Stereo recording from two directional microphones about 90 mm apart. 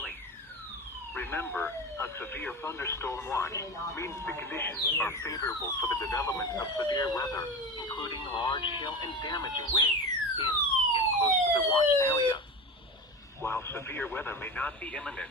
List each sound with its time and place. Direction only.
1.1 s speech: 25° left (ahead or behind)
4.3 s speech: 25° left (ahead or behind)
5.2 s speech: 40° left (ahead or behind); by 9.9 s 55° left (ahead or behind)
10.3 s police car: 65° left (ahead or behind)
12.1 s a sound: 65° left (ahead or behind)
13.4 s speech: 30° left (ahead or behind); by 15.3 s 15° left (ahead or behind)